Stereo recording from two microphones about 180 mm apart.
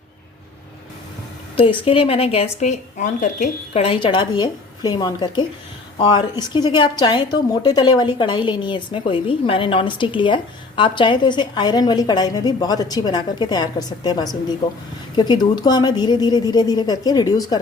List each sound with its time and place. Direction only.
1.5 s a woman's voice: 30° left (ahead or behind)